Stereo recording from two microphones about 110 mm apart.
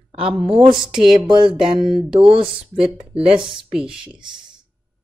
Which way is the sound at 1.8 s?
45° right (ahead or behind).